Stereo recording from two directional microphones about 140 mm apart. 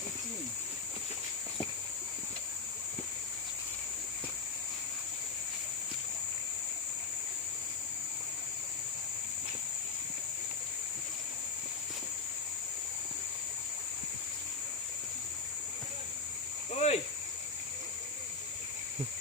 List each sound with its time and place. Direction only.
16.7 s cricket: 50° left (ahead or behind)